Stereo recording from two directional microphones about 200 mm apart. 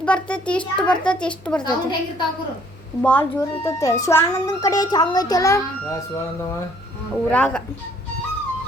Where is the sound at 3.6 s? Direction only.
15° left (ahead or behind).